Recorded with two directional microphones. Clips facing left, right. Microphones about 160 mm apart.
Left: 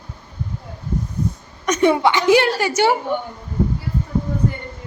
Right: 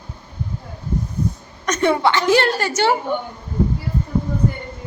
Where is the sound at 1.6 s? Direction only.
15° left (ahead or behind).